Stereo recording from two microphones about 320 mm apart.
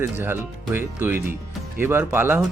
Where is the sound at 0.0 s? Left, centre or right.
Centre.